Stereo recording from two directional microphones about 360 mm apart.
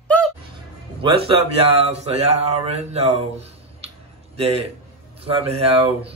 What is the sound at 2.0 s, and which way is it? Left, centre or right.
Speech, centre.